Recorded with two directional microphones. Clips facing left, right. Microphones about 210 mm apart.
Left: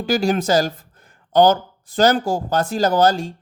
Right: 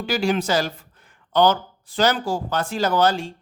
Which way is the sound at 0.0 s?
40° left (ahead or behind).